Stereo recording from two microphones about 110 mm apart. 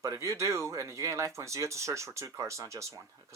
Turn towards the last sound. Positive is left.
turn(degrees=-30)  # may be behind; listen again after turning